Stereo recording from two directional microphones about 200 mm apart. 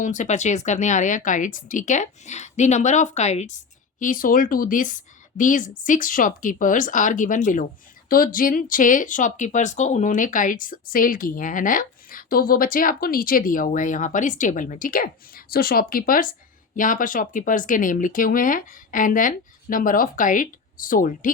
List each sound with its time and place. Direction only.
0.0 s a woman's voice: 40° left (ahead or behind)